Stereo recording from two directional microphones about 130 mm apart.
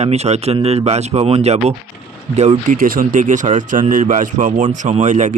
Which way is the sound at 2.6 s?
90° right.